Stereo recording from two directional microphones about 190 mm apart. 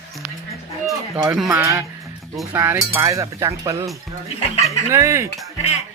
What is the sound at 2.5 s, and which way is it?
Music, 15° right (ahead or behind).